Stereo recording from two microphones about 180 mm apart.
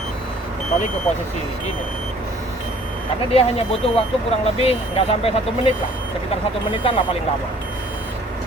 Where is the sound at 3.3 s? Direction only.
30° left (ahead or behind).